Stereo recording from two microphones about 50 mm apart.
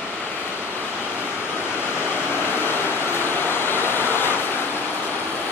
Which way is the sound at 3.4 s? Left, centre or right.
Left.